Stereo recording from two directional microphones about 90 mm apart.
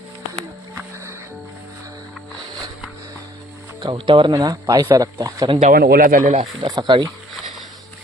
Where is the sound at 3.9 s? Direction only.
60° right (ahead or behind).